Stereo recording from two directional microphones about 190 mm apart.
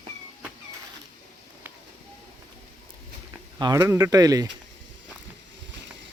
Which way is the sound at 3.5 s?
20° right (ahead or behind).